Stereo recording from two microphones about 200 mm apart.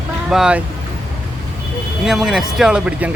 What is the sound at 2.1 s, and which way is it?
Speech, centre (ahead or behind).